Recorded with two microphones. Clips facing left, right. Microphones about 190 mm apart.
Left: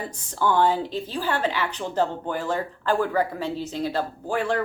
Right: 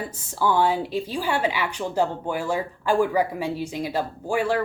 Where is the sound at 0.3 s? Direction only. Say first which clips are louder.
Even; 5° right (ahead or behind).